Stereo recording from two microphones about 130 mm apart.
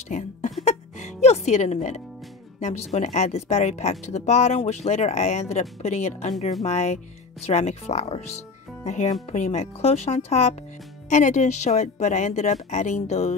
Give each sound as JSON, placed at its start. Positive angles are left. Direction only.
{"t": 0.1, "sound": "a woman's voice", "side_deg": 65}
{"t": 0.7, "sound": "music", "side_deg": 65}
{"t": 2.6, "sound": "a woman's voice", "side_deg": 65}
{"t": 11.1, "sound": "a woman's voice", "side_deg": 70}